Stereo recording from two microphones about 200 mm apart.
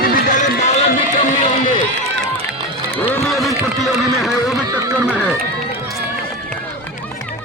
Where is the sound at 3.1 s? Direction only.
Centre (ahead or behind).